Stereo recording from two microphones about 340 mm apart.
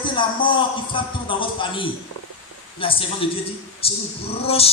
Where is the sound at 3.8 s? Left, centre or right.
Centre.